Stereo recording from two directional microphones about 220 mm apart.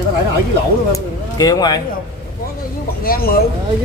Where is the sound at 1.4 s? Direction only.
20° left (ahead or behind).